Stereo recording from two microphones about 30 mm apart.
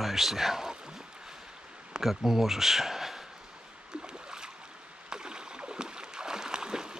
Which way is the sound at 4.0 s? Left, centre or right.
Right.